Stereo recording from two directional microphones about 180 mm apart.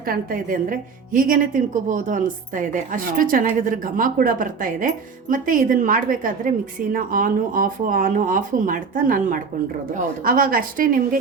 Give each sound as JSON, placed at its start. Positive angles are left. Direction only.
{"t": 0.0, "sound": "a woman's voice", "side_deg": -50}